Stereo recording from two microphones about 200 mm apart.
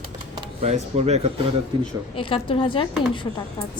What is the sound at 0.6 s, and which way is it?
Speech, 35° right (ahead or behind).